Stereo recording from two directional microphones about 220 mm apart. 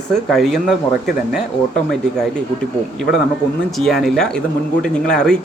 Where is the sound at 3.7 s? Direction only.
Centre (ahead or behind).